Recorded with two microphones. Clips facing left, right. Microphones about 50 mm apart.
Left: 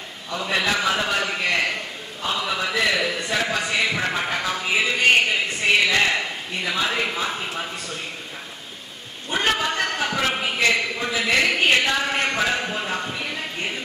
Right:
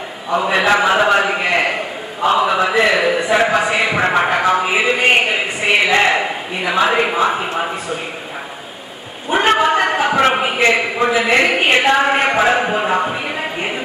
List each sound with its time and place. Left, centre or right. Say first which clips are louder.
0.3 s a man's voice: right 9 dB; right
9.5 s a sound: right 10 dB; right
10.1 s a man's voice: right 9 dB; right
10.5 s speech: right 6 dB; right